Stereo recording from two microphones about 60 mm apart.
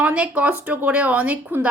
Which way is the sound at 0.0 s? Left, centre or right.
Right.